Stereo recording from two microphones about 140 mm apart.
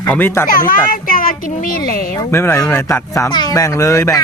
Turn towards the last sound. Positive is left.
turn(degrees=25)  # may be behind; listen again after turning